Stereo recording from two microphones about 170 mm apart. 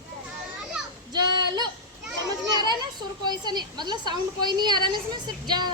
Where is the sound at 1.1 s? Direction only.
25° right (ahead or behind).